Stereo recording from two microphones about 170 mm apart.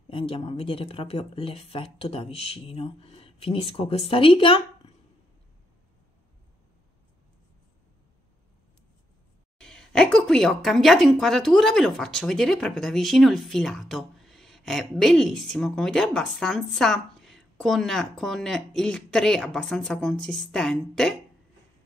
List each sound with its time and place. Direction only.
0.1 s speech: 30° left (ahead or behind)
9.6 s a woman's voice: 5° left (ahead or behind)